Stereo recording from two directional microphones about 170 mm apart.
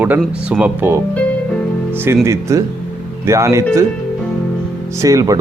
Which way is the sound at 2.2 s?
15° right (ahead or behind).